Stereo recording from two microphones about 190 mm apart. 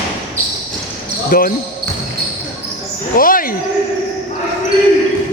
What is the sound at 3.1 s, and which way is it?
Speech, 45° left (ahead or behind).